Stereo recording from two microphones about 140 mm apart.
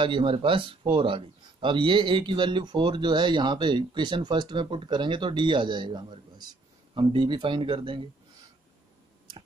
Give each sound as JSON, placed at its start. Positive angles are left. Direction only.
{"t": 0.0, "sound": "speech", "side_deg": -35}